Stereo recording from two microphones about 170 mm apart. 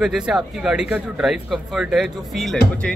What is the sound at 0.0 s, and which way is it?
Speech, 5° right (ahead or behind).